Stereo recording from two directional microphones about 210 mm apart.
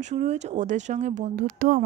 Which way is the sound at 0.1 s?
35° right (ahead or behind).